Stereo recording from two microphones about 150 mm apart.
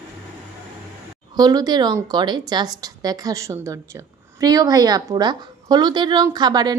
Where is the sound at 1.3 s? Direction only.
25° right (ahead or behind).